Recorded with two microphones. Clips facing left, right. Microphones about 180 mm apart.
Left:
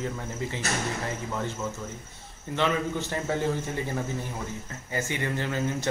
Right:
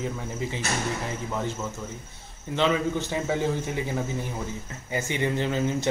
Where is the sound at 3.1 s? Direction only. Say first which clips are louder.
Even; 10° right (ahead or behind).